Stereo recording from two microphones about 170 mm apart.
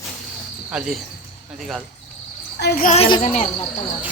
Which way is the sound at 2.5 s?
70° left (ahead or behind).